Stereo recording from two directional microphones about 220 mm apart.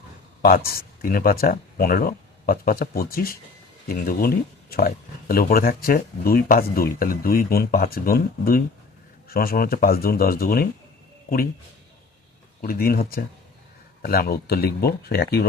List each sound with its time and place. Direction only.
0.4 s speech: 40° left (ahead or behind)
12.6 s speech: 40° left (ahead or behind)